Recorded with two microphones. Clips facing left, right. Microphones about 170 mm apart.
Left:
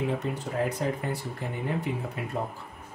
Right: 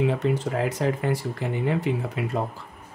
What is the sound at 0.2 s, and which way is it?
Speech, 90° right.